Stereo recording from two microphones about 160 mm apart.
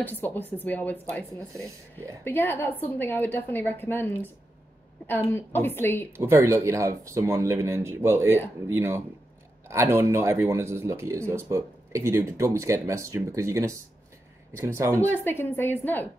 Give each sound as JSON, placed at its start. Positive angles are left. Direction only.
{"t": 0.0, "sound": "a woman's voice", "side_deg": 10}
{"t": 2.2, "sound": "a woman's voice", "side_deg": 15}
{"t": 6.1, "sound": "speech", "side_deg": -15}
{"t": 15.0, "sound": "a woman's voice", "side_deg": 15}